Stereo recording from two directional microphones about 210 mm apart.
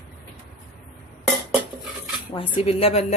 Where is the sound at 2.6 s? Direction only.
25° left (ahead or behind).